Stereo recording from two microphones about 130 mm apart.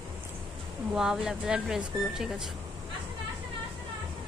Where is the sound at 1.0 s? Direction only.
5° right (ahead or behind).